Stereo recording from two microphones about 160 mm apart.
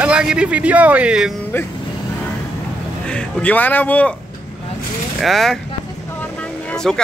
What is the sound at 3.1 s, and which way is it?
Speech, 5° left (ahead or behind).